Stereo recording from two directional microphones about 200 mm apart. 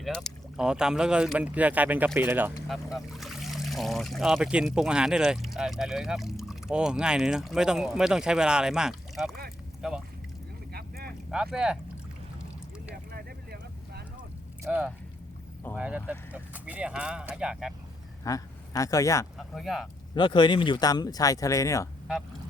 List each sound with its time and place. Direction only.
0.0 s speech: centre (ahead or behind)
10.7 s vehicle: 50° right (ahead or behind)
11.5 s speech: 5° right (ahead or behind)
12.9 s vehicle: 50° right (ahead or behind)
14.6 s speech: 5° right (ahead or behind)
18.2 s speech: 15° left (ahead or behind)
19.4 s speech: centre (ahead or behind)
20.1 s speech: 25° left (ahead or behind)